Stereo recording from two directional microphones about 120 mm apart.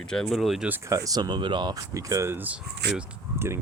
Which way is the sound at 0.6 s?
15° right (ahead or behind).